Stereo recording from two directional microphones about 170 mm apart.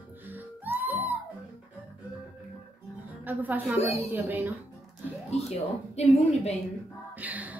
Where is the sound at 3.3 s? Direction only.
10° right (ahead or behind).